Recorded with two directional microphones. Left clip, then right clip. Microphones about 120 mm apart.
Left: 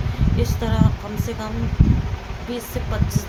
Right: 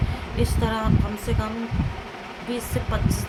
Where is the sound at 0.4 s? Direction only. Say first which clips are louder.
Right 3 dB; 5° right (ahead or behind).